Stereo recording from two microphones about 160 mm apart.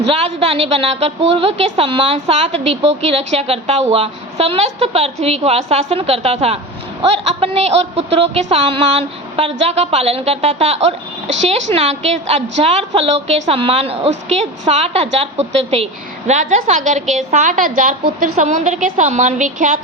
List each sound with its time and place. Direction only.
0.1 s a woman's voice: 40° right (ahead or behind); by 19.8 s 55° right (ahead or behind)